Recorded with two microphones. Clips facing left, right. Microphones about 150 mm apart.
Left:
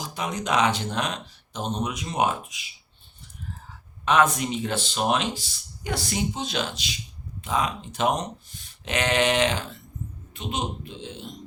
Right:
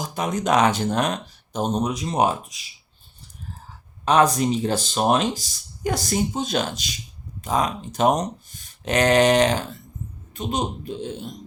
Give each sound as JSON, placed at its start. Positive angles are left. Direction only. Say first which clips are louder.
{"t": 0.0, "sound": "speech", "louder": "right 5 dB", "side_deg": -45}
{"t": 4.0, "sound": "speech", "louder": "right 3 dB", "side_deg": -35}